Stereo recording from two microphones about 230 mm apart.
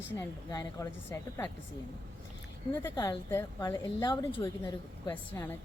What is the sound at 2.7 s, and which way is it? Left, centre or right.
A woman's voice, centre.